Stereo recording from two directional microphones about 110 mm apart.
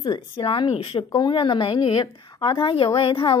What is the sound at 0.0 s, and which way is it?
Speech, 40° left (ahead or behind).